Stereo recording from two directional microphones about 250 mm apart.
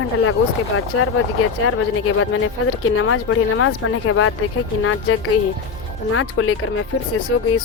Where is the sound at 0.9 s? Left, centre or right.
Left.